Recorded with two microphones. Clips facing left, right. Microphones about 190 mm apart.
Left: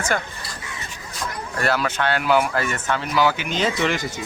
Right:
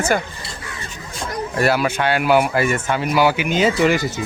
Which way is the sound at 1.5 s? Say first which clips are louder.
Right 4 dB; 10° right (ahead or behind).